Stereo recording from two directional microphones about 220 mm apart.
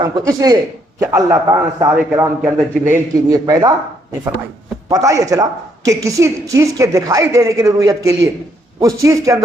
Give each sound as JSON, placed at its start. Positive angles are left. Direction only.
{"t": 0.0, "sound": "a woman's voice", "side_deg": -15}
{"t": 4.9, "sound": "a woman's voice", "side_deg": -15}